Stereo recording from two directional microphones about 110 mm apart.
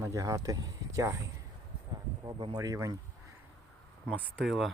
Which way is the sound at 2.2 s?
40° right (ahead or behind).